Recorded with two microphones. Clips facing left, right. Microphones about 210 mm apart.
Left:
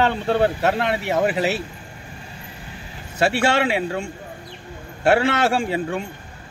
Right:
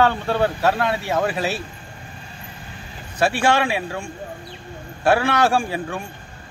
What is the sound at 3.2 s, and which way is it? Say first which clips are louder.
Speech: even; 25° left (ahead or behind).